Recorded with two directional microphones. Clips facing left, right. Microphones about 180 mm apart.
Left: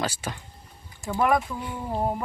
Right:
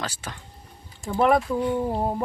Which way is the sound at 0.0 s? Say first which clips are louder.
Left 4 dB; 10° left (ahead or behind).